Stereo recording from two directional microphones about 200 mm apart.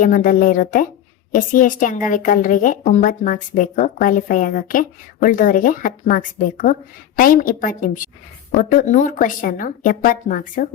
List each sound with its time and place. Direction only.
0.0 s speech: 40° left (ahead or behind)